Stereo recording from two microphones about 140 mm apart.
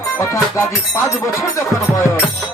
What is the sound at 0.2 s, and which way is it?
Music, 20° left (ahead or behind).